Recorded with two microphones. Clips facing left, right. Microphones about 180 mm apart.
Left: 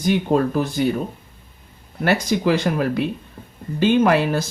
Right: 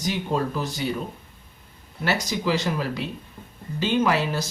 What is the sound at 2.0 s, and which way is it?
Speech, 55° left (ahead or behind).